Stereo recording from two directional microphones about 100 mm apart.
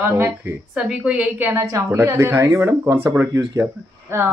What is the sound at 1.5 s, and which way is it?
Speech, 30° right (ahead or behind).